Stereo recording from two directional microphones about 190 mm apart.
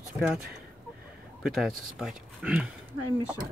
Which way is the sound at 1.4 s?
Centre (ahead or behind).